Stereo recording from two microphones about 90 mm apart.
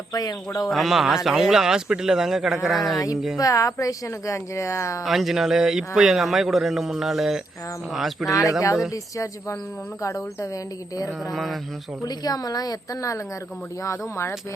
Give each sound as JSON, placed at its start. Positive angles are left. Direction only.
{"t": 0.1, "sound": "speech", "side_deg": 40}
{"t": 0.7, "sound": "a man's voice", "side_deg": 0}
{"t": 3.3, "sound": "speech", "side_deg": 40}
{"t": 5.0, "sound": "a man's voice", "side_deg": 0}
{"t": 8.3, "sound": "speech", "side_deg": 35}
{"t": 11.3, "sound": "a man's voice", "side_deg": 0}
{"t": 12.0, "sound": "a woman's voice", "side_deg": 45}